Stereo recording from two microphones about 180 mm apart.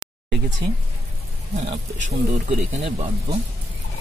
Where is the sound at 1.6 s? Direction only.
40° right (ahead or behind).